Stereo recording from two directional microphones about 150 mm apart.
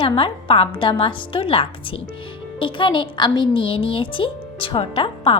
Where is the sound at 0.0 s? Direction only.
35° left (ahead or behind).